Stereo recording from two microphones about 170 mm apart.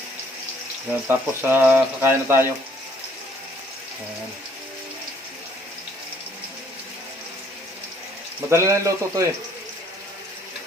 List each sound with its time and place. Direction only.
1.0 s speech: 10° right (ahead or behind)
8.4 s speech: 15° right (ahead or behind)